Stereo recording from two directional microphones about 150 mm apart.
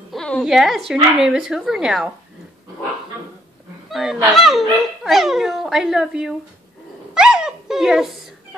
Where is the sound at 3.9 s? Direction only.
Centre (ahead or behind).